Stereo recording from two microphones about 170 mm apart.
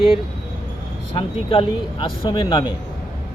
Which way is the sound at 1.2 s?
30° left (ahead or behind).